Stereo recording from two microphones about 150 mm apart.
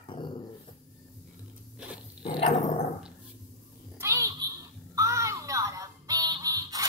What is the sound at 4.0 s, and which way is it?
Babbling, 20° right (ahead or behind).